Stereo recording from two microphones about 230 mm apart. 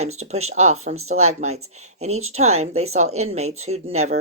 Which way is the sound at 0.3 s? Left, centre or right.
Right.